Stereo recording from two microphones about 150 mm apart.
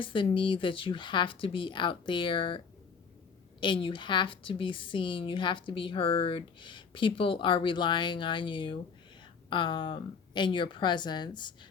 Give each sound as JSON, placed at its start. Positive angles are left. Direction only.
{"t": 0.0, "sound": "a woman's voice", "side_deg": 35}
{"t": 3.6, "sound": "a woman's voice", "side_deg": 35}